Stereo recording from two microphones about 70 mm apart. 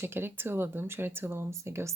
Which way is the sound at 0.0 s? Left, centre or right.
Right.